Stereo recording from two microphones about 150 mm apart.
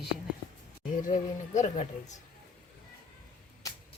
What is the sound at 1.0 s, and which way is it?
Speech, 55° left (ahead or behind).